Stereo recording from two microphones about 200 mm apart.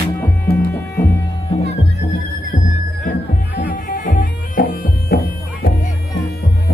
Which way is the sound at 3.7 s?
45° left (ahead or behind).